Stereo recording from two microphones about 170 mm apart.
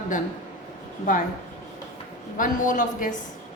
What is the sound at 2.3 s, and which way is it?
Speech, 50° left (ahead or behind).